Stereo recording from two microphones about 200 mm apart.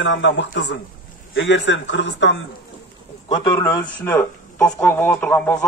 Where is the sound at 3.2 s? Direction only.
20° left (ahead or behind).